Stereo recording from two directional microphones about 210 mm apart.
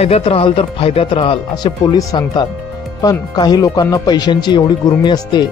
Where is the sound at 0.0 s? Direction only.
30° left (ahead or behind).